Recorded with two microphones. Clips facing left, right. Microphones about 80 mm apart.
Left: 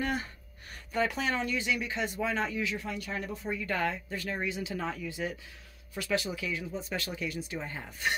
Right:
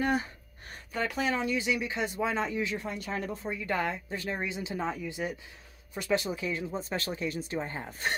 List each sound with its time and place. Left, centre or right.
0.0 s speech: centre
0.9 s speech: centre
2.6 s speech: right
3.4 s speech: centre; by 8.1 s right